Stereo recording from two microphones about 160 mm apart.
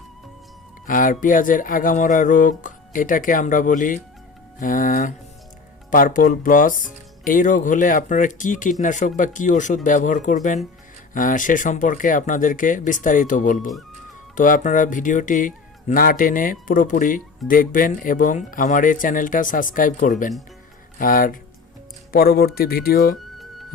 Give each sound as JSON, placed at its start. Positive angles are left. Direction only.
{"t": 0.9, "sound": "speech", "side_deg": 55}
{"t": 22.1, "sound": "speech", "side_deg": 75}